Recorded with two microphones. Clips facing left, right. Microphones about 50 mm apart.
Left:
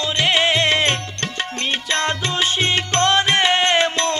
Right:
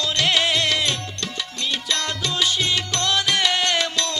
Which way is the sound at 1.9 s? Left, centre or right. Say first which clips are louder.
Left 6 dB; left.